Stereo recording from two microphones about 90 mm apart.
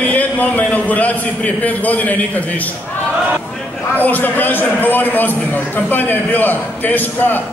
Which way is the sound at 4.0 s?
20° left (ahead or behind).